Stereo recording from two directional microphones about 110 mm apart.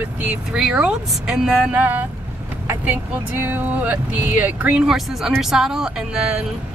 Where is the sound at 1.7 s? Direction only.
20° right (ahead or behind).